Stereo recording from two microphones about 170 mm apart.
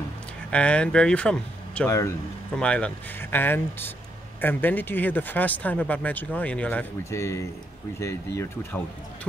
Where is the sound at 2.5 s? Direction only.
5° left (ahead or behind).